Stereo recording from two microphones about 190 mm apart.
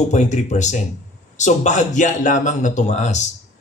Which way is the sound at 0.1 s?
40° left (ahead or behind).